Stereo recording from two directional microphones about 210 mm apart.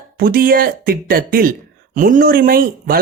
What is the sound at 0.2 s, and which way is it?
Speech, 45° right (ahead or behind).